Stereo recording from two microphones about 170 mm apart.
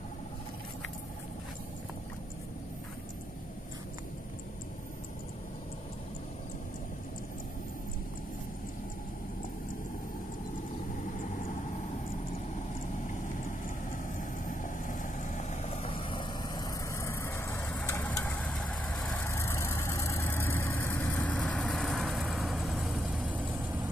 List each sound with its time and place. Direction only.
14.1 s vehicle: 50° left (ahead or behind); by 19.2 s centre (ahead or behind)
19.2 s vehicle: 15° left (ahead or behind); by 23.6 s 5° right (ahead or behind)